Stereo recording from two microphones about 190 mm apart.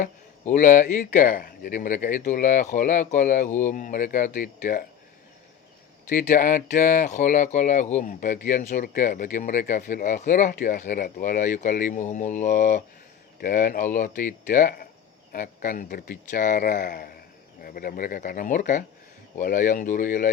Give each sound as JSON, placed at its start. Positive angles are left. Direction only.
{"t": 0.0, "sound": "speech", "side_deg": 40}
{"t": 6.1, "sound": "speech", "side_deg": 45}